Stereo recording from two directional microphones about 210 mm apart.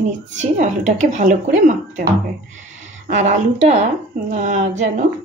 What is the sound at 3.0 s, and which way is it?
A woman's voice, 35° right (ahead or behind).